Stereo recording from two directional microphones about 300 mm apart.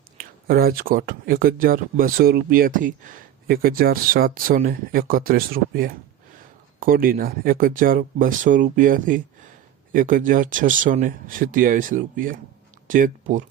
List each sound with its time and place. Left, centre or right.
0.2 s speech: right